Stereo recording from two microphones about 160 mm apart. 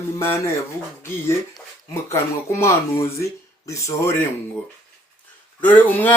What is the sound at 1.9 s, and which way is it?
Speech, 15° left (ahead or behind).